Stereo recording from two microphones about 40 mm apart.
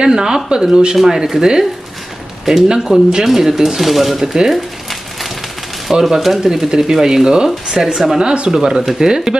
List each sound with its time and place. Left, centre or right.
0.0 s speech: centre
5.9 s speech: centre
8.2 s speech: right